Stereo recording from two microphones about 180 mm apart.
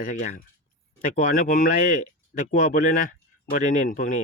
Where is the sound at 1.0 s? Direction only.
50° left (ahead or behind).